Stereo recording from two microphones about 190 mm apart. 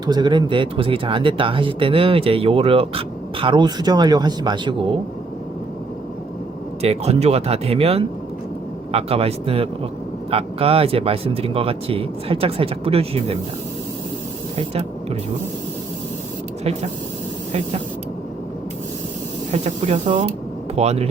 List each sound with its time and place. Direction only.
0.0 s speech: 20° right (ahead or behind)
6.8 s speech: 35° right (ahead or behind)
14.5 s speech: 30° right (ahead or behind)
19.5 s speech: 35° right (ahead or behind)